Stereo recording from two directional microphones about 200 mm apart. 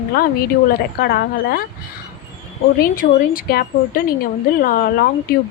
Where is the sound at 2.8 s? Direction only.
45° left (ahead or behind).